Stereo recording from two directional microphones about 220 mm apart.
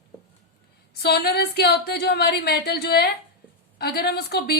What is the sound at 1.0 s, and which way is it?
Speech, 45° left (ahead or behind).